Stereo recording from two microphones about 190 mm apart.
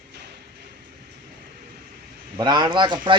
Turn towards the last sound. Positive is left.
turn(degrees=-25)  # may be behind; listen again after turning